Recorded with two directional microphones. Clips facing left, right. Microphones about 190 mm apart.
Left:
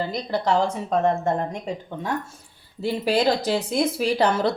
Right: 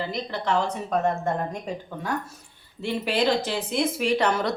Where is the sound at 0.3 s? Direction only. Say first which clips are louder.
Left 5 dB; 35° left (ahead or behind).